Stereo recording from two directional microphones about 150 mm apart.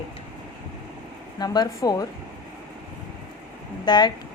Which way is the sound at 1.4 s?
25° left (ahead or behind).